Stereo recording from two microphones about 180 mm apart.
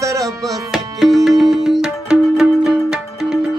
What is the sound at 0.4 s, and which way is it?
Tabla, centre (ahead or behind).